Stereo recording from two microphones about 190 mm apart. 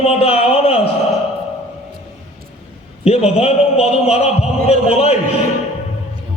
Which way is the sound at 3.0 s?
35° left (ahead or behind).